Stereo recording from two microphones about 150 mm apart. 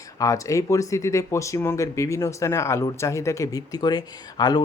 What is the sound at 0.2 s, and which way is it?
Speech, 20° left (ahead or behind).